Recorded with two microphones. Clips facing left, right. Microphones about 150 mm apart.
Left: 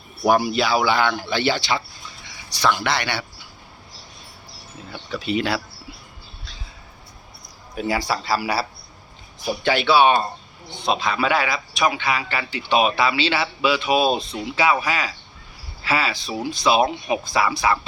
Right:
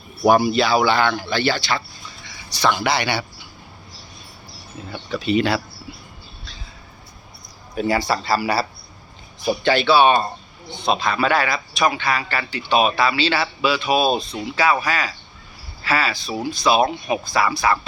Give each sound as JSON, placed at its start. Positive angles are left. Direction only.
{"t": 0.3, "sound": "speech", "side_deg": 0}
{"t": 2.6, "sound": "speech", "side_deg": -5}
{"t": 4.9, "sound": "speech", "side_deg": 5}
{"t": 7.8, "sound": "speech", "side_deg": 5}
{"t": 9.6, "sound": "speech", "side_deg": 10}